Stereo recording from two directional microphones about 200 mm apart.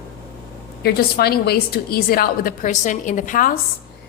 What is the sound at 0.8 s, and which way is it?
A woman's voice, 50° left (ahead or behind).